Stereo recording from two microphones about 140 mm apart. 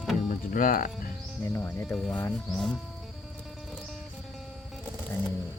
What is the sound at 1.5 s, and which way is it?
Speech, 20° left (ahead or behind).